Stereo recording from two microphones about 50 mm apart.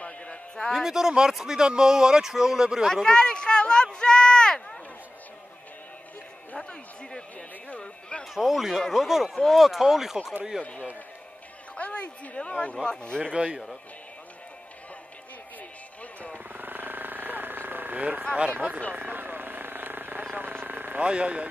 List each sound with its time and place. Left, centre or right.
0.0 s a sound: left
0.7 s speech: centre
2.9 s speech: centre
6.6 s speech: centre
8.4 s speech: centre
10.6 s speech: left
13.2 s speech: centre
16.5 s vehicle: right
18.5 s speech: right
18.9 s vehicle: right
21.0 s speech: right